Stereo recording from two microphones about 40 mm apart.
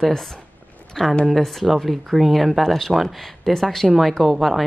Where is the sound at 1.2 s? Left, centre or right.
Centre.